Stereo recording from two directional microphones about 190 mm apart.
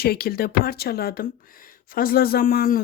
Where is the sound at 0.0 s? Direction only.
55° left (ahead or behind).